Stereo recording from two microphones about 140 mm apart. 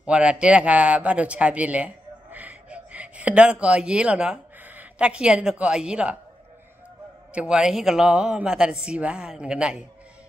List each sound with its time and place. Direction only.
0.0 s a man's voice: 5° right (ahead or behind)
7.3 s speech: 5° right (ahead or behind)